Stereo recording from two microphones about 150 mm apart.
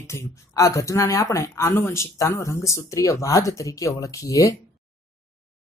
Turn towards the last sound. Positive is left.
turn(degrees=20)  # may be behind; listen again after turning